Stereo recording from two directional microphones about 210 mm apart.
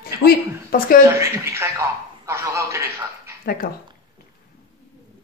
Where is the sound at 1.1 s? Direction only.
15° right (ahead or behind).